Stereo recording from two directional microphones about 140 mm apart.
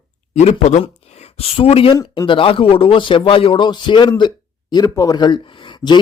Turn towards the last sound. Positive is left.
turn(degrees=35)  # may be behind; listen again after turning